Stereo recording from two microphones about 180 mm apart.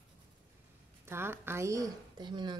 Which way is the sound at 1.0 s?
15° right (ahead or behind).